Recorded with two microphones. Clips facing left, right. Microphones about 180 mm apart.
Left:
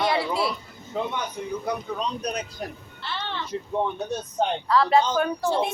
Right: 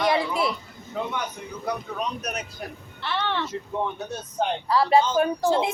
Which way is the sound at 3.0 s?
65° right (ahead or behind).